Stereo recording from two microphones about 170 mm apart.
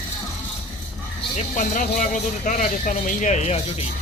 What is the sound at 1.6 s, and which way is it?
Speech, 50° left (ahead or behind).